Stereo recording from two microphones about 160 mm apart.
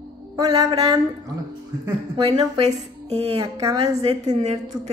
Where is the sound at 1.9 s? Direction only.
35° right (ahead or behind).